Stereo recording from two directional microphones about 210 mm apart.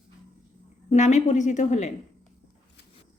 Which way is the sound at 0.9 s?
35° left (ahead or behind).